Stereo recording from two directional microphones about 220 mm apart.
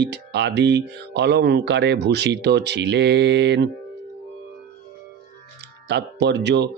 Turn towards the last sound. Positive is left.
turn(degrees=-50)  # may be behind; listen again after turning